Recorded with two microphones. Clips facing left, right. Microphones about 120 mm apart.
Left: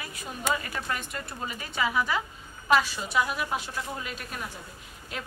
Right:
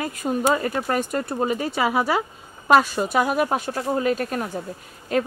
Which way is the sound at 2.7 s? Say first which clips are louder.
Right 7 dB; 50° right (ahead or behind).